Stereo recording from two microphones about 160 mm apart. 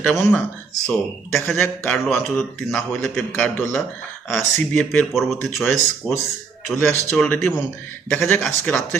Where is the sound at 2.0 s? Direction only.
Centre (ahead or behind).